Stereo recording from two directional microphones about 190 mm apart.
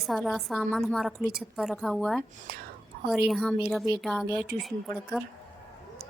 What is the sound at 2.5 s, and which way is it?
Speech, 55° right (ahead or behind).